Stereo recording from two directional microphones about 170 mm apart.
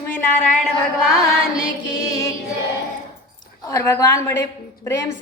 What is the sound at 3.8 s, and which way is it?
Speech, 15° left (ahead or behind).